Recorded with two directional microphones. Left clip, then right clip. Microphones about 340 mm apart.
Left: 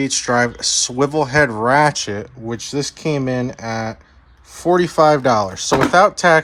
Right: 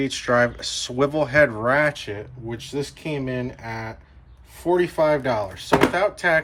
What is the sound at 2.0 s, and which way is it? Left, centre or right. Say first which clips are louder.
Speech: left 7 dB; left.